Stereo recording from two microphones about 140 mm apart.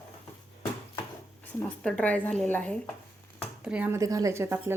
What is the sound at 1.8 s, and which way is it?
Speech, 10° left (ahead or behind).